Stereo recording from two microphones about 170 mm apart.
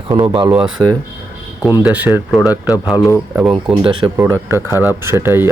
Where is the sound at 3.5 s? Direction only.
30° right (ahead or behind).